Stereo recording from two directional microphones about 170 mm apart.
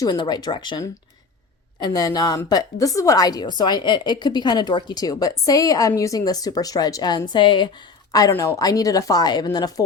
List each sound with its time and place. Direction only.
0.0 s a woman's voice: 25° left (ahead or behind)